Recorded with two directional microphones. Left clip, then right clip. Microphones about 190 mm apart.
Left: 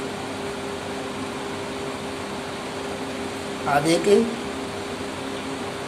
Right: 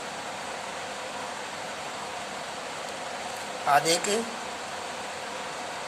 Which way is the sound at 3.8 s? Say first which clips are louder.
Left 7 dB; 15° right (ahead or behind).